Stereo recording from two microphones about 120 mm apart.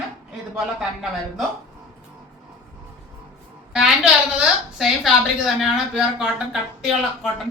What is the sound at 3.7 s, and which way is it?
A woman's voice, 5° right (ahead or behind).